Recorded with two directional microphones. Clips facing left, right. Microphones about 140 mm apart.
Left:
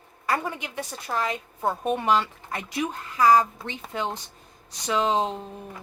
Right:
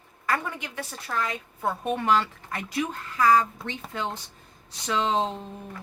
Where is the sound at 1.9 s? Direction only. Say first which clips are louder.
Even; 15° left (ahead or behind).